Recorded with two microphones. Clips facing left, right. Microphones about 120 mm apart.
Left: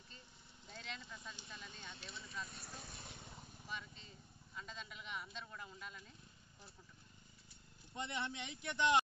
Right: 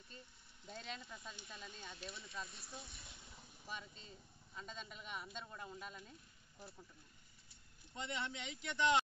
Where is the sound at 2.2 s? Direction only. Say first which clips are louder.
Left 3 dB; 30° right (ahead or behind).